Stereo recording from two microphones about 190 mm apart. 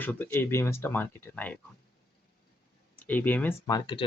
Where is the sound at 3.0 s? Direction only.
10° left (ahead or behind).